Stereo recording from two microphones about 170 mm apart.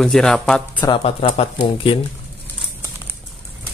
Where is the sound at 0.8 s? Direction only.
30° left (ahead or behind).